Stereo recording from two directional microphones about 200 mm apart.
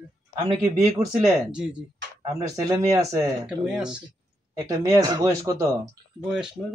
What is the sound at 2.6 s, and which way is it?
Speech, 15° right (ahead or behind).